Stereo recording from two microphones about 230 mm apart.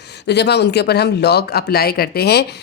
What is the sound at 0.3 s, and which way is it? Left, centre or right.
Speech, left.